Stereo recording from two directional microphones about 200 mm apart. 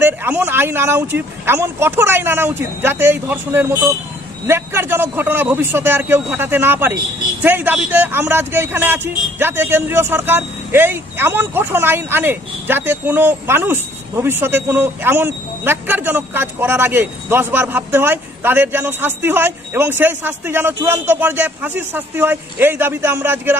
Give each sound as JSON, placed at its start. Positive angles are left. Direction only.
{"t": 0.0, "sound": "a man's voice", "side_deg": -10}